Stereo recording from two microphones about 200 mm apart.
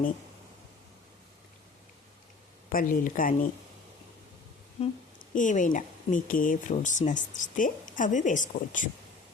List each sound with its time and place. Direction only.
2.6 s speech: 45° left (ahead or behind)
4.8 s speech: 30° left (ahead or behind)